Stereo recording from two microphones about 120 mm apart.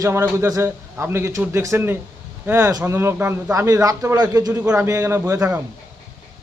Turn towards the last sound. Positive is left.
turn(degrees=-25)  # may be behind; listen again after turning